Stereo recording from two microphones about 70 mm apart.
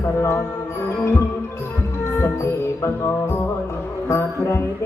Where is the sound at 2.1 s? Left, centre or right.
Left.